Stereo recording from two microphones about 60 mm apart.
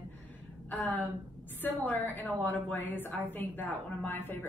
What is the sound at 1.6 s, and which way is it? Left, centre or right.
A woman's voice, left.